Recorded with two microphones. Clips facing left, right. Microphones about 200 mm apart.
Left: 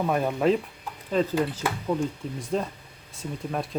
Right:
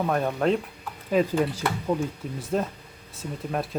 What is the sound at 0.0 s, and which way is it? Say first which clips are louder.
Speech: left 1 dB; 5° left (ahead or behind).